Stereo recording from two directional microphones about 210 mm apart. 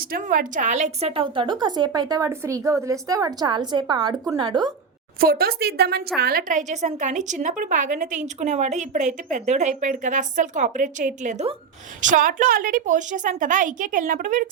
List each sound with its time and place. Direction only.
0.0 s a woman's voice: 40° right (ahead or behind); by 4.7 s 20° right (ahead or behind)
5.2 s a woman's voice: 45° right (ahead or behind)